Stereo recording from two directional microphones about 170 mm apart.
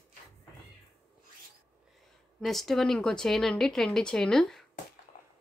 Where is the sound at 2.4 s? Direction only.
Centre (ahead or behind).